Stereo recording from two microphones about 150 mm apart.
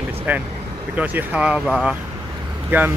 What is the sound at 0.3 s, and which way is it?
Speech, 10° right (ahead or behind).